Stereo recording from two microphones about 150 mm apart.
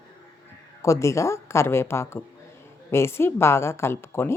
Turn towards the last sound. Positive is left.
turn(degrees=15)  # may be behind; listen again after turning